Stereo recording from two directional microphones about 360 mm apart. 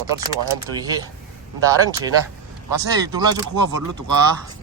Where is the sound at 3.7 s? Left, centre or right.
Right.